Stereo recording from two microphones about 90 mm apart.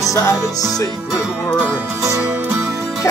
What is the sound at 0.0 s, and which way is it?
Music, 35° left (ahead or behind).